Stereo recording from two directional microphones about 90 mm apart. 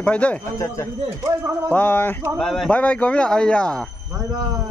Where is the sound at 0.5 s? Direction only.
35° left (ahead or behind).